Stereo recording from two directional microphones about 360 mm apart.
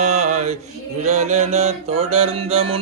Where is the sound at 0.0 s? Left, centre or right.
Centre.